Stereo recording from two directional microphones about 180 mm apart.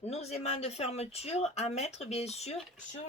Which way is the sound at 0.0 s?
35° left (ahead or behind).